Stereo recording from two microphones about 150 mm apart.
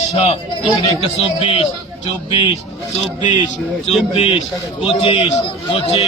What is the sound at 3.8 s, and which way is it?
A man's voice, 45° left (ahead or behind).